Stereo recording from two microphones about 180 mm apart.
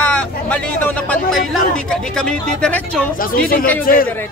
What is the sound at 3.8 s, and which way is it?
Speech, 50° left (ahead or behind).